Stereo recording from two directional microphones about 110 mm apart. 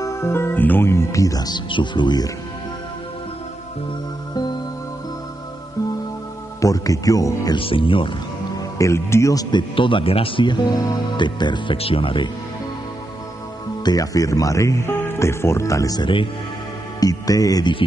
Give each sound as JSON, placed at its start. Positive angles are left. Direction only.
{"t": 0.0, "sound": "speech", "side_deg": 25}
{"t": 1.7, "sound": "speech", "side_deg": 45}
{"t": 6.6, "sound": "speech", "side_deg": 30}
{"t": 7.5, "sound": "speech", "side_deg": 55}
{"t": 8.5, "sound": "speech", "side_deg": 30}
{"t": 13.8, "sound": "speech", "side_deg": 35}